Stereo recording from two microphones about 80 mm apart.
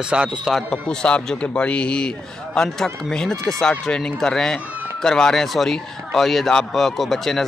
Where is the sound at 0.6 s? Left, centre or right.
Centre.